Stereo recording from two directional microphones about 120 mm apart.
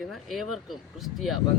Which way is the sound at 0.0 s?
Centre (ahead or behind).